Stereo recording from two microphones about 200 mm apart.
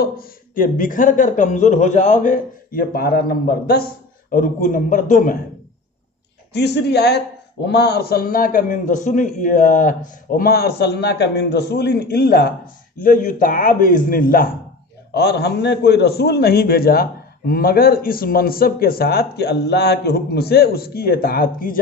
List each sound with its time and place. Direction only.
0.0 s a man's voice: 45° left (ahead or behind)
6.5 s a man's voice: 55° left (ahead or behind)
15.1 s a man's voice: 55° left (ahead or behind)